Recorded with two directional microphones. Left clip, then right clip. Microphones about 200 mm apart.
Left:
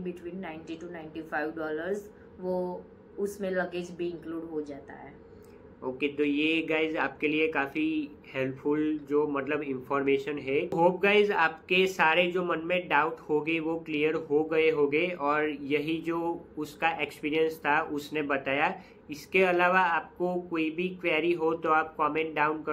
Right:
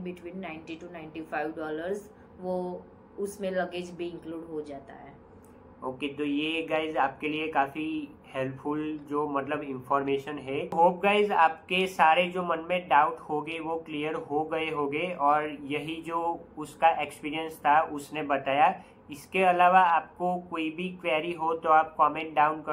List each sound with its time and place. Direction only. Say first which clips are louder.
0.0 s a woman's voice: left 1 dB; 10° right (ahead or behind)
3.3 s a woman's voice: right 2 dB; 10° right (ahead or behind)
5.9 s speech: left 3 dB; 20° left (ahead or behind)